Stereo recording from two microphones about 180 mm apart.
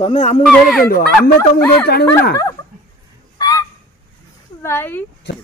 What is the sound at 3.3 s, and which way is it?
Goose, 20° left (ahead or behind).